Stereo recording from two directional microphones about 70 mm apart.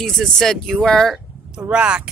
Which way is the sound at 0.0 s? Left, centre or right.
Centre.